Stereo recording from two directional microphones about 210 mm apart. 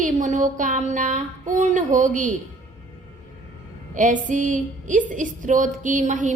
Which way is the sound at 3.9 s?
40° right (ahead or behind).